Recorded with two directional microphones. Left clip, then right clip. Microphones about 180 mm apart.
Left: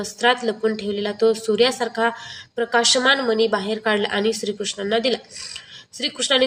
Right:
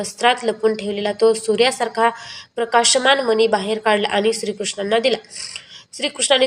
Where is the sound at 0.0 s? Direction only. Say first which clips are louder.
Right 2 dB; 20° right (ahead or behind).